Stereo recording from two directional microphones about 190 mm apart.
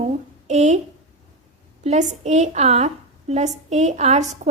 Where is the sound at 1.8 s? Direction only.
40° right (ahead or behind).